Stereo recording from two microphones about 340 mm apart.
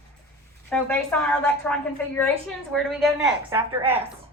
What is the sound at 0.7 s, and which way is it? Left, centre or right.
A woman's voice, centre.